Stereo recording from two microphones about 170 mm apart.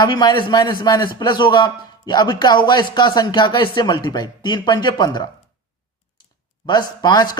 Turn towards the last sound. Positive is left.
turn(degrees=25)  # may be behind; listen again after turning